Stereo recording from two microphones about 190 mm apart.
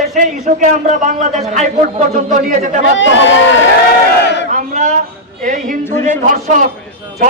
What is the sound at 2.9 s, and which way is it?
Speech, 75° left (ahead or behind).